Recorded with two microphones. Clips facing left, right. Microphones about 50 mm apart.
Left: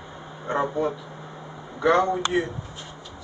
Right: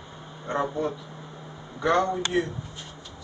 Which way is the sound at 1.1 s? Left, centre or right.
Centre.